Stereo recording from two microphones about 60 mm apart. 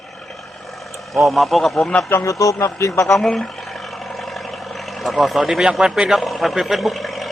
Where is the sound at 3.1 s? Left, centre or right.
Centre.